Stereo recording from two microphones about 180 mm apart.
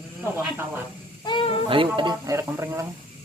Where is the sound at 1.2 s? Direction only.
30° left (ahead or behind).